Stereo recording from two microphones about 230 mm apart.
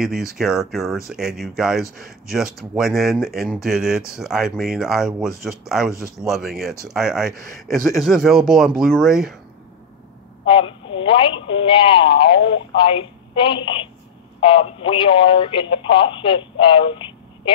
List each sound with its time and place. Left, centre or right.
0.0 s speech: centre
10.4 s a woman's voice: left